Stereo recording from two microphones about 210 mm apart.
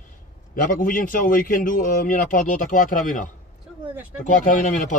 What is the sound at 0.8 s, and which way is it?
Speech, 40° left (ahead or behind).